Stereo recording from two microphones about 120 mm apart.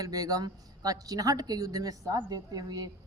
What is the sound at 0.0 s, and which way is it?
Speech, 30° right (ahead or behind).